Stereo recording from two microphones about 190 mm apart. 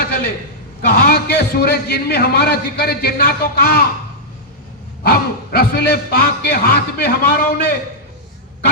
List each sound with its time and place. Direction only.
0.9 s a man's voice: 50° left (ahead or behind)
5.0 s a man's voice: 55° left (ahead or behind)